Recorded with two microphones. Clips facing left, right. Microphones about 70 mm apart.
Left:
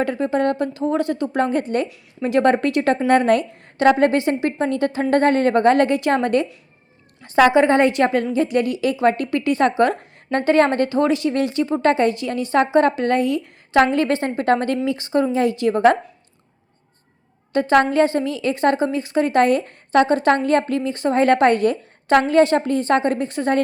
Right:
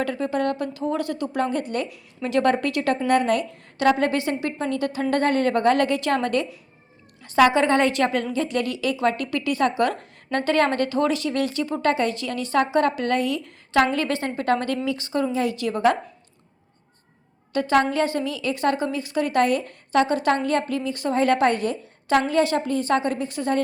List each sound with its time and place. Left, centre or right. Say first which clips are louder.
0.0 s a woman's voice: left 4 dB; left
17.5 s a woman's voice: left 4 dB; left